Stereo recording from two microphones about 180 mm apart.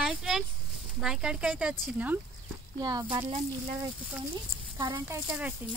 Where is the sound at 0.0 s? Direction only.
Centre (ahead or behind).